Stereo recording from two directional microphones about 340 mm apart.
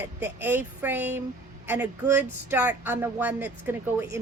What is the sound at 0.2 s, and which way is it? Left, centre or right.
A woman's voice, centre.